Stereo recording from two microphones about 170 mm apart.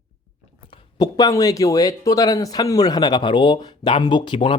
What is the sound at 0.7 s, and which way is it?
Speech, 25° left (ahead or behind).